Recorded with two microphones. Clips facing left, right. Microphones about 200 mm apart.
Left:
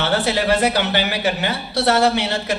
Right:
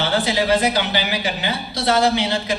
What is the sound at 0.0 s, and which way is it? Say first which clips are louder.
A man's voice: left 1 dB; 65° left (ahead or behind).